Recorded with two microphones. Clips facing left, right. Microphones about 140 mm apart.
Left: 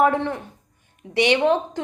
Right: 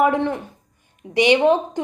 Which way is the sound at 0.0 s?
15° right (ahead or behind).